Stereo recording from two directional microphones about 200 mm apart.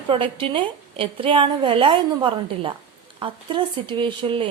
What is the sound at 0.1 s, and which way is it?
A woman's voice, 25° right (ahead or behind).